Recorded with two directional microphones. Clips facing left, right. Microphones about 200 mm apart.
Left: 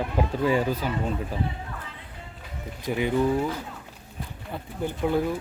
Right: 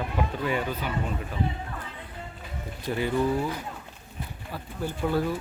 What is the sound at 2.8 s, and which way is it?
Speech, 15° left (ahead or behind).